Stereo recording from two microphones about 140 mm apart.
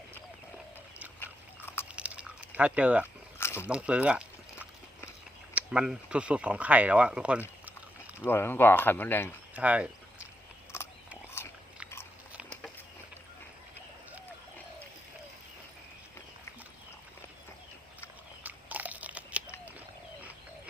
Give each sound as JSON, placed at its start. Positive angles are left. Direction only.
{"t": 1.2, "sound": "biting", "side_deg": 15}
{"t": 2.0, "sound": "a sound", "side_deg": -10}
{"t": 3.3, "sound": "biting", "side_deg": 20}
{"t": 3.7, "sound": "speech", "side_deg": -10}
{"t": 8.3, "sound": "speech", "side_deg": 15}
{"t": 9.6, "sound": "horse", "side_deg": -10}
{"t": 10.7, "sound": "a sound", "side_deg": 20}
{"t": 11.3, "sound": "biting", "side_deg": 15}
{"t": 18.4, "sound": "crunch", "side_deg": -10}